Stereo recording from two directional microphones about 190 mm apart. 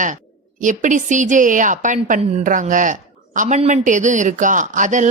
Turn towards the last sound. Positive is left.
turn(degrees=-40)  # may be behind; listen again after turning